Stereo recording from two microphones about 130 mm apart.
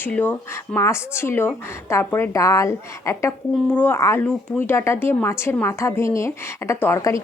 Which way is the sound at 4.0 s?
25° left (ahead or behind).